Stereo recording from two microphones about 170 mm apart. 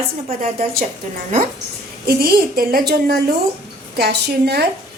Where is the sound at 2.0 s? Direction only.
60° right (ahead or behind).